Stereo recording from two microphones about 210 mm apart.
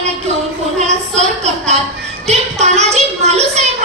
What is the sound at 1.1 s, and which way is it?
A woman's voice, 30° right (ahead or behind).